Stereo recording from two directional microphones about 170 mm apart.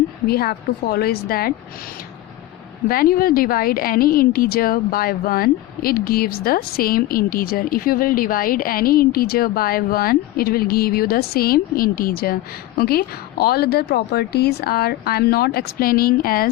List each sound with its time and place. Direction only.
0.3 s a woman's voice: 65° left (ahead or behind)
2.9 s a woman's voice: 60° left (ahead or behind)